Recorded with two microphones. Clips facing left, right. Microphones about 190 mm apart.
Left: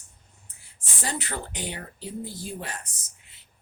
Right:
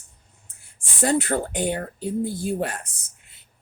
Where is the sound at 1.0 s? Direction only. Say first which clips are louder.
Right 11 dB; 50° right (ahead or behind).